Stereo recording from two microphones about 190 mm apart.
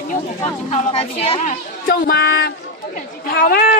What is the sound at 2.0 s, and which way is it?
Speech, 60° left (ahead or behind).